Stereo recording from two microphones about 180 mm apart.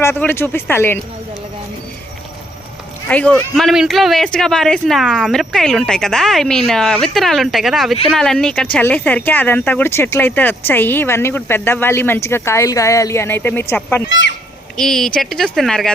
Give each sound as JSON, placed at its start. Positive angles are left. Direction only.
{"t": 0.0, "sound": "speech", "side_deg": 10}
{"t": 3.1, "sound": "speech", "side_deg": 10}
{"t": 14.1, "sound": "speech", "side_deg": 85}
{"t": 14.8, "sound": "speech", "side_deg": 0}